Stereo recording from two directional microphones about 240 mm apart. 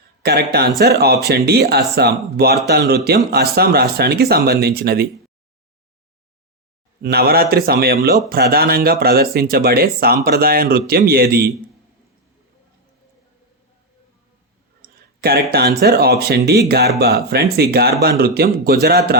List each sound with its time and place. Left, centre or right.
0.2 s speech: right
7.0 s speech: right
14.8 s speech: right